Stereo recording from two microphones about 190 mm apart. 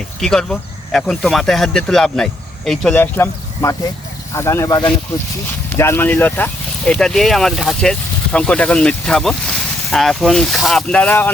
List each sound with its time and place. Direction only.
0.2 s speech: 5° left (ahead or behind)